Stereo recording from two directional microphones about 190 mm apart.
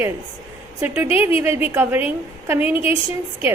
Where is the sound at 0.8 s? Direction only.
10° right (ahead or behind).